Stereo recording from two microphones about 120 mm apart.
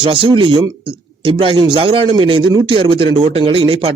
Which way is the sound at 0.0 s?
45° right (ahead or behind).